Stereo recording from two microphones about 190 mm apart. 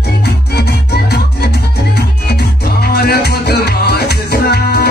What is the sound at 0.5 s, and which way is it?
Music, 60° left (ahead or behind).